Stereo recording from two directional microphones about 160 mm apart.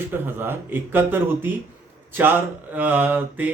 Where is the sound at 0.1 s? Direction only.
15° right (ahead or behind).